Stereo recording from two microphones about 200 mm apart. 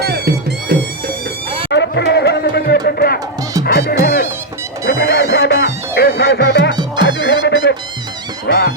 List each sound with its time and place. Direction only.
0.0 s music: 55° right (ahead or behind)
1.7 s a sound: 60° left (ahead or behind)
3.6 s music: 50° left (ahead or behind)